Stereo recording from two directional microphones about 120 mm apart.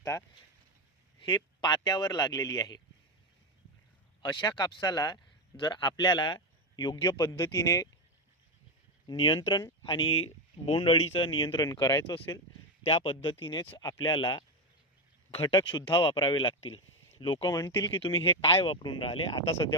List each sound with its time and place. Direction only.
0.0 s speech: 25° left (ahead or behind)
1.6 s speech: 35° left (ahead or behind)
4.2 s speech: 40° left (ahead or behind)
9.0 s speech: 45° left (ahead or behind)
9.4 s speech: 30° left (ahead or behind)
10.7 s speech: 55° left (ahead or behind); by 12.1 s 30° left (ahead or behind)
12.1 s speech: 45° left (ahead or behind)
13.7 s speech: 35° left (ahead or behind)
15.5 s speech: 40° left (ahead or behind)
17.5 s speech: 35° left (ahead or behind)
18.0 s speech: 50° left (ahead or behind)